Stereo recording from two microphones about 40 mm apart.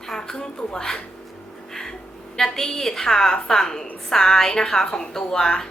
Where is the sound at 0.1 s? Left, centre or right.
Centre.